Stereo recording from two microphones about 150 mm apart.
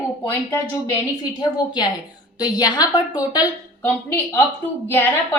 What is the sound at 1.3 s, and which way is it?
A woman's voice, 30° left (ahead or behind).